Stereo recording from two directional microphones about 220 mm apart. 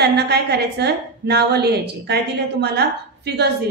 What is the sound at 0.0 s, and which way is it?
A woman's voice, 50° right (ahead or behind).